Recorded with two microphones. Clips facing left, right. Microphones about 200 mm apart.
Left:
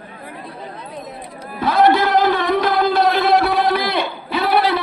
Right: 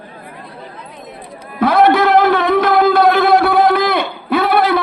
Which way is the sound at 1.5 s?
60° right (ahead or behind).